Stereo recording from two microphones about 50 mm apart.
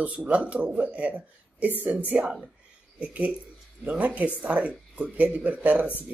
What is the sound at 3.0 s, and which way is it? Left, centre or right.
Speech, right.